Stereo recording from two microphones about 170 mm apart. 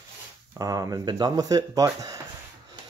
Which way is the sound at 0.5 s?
20° right (ahead or behind).